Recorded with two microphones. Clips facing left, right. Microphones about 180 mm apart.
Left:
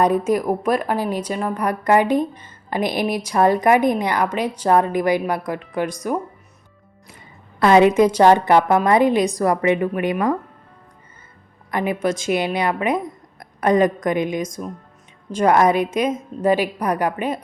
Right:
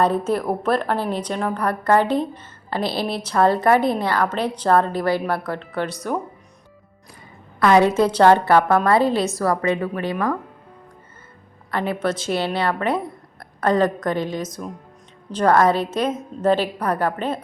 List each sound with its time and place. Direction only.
0.0 s a woman's voice: 10° left (ahead or behind)
7.6 s a woman's voice: 20° left (ahead or behind)
11.7 s a woman's voice: 15° left (ahead or behind)